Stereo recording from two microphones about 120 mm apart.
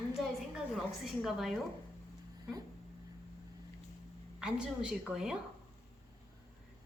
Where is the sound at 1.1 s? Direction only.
Centre (ahead or behind).